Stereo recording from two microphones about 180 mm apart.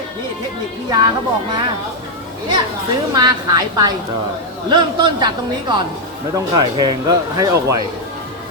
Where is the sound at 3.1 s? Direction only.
20° right (ahead or behind).